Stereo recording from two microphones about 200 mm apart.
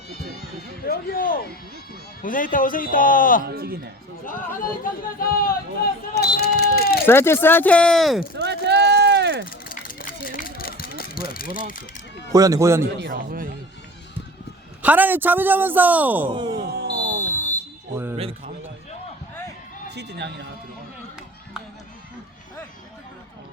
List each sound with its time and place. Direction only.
0.9 s speech: 45° left (ahead or behind)
3.4 s a man's voice: 50° right (ahead or behind)
4.3 s speech: 45° left (ahead or behind)
6.1 s a sound: 50° left (ahead or behind)
7.0 s speech: 10° left (ahead or behind)
8.4 s a sound: 60° right (ahead or behind)
9.5 s a sound: 45° left (ahead or behind)
12.3 s a man's voice: 15° right (ahead or behind)
13.1 s a man's voice: 45° right (ahead or behind)
14.8 s a man's voice: 10° right (ahead or behind)
16.3 s speech: 25° right (ahead or behind)
16.6 s a sound: 50° right (ahead or behind)
18.2 s a man's voice: 30° right (ahead or behind)
19.9 s speech: 60° right (ahead or behind)